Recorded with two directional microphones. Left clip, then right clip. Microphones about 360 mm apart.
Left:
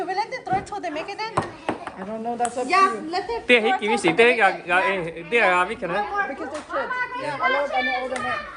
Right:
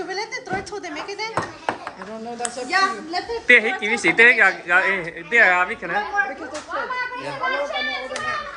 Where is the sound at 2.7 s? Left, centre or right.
Left.